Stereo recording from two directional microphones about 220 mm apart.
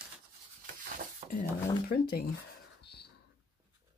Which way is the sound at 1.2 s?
30° right (ahead or behind).